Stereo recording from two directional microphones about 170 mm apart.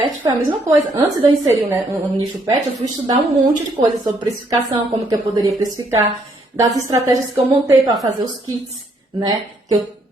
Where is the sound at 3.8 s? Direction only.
20° right (ahead or behind).